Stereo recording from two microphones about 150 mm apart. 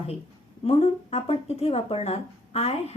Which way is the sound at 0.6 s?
40° left (ahead or behind).